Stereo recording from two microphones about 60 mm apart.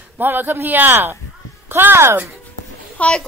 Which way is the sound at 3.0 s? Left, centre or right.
Centre.